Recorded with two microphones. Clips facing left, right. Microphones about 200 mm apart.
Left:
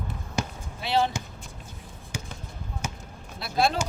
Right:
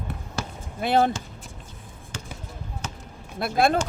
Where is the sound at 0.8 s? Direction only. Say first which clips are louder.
Right 4 dB; 50° right (ahead or behind).